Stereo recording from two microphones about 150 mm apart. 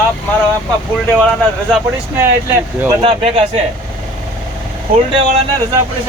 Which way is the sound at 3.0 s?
35° right (ahead or behind).